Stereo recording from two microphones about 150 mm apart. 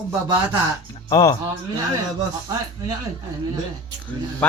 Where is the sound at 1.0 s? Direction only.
30° left (ahead or behind).